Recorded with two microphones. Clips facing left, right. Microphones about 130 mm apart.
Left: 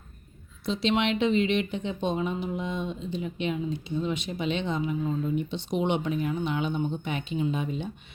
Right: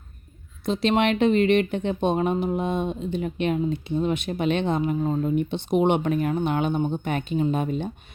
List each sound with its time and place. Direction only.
0.6 s speech: 50° right (ahead or behind)